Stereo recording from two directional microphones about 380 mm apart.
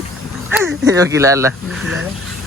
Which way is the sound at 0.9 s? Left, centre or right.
Centre.